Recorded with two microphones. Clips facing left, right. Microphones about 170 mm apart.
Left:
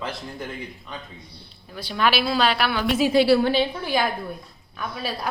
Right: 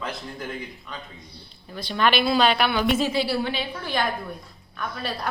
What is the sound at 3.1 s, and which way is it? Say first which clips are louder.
Speech: left 8 dB; 75° left (ahead or behind).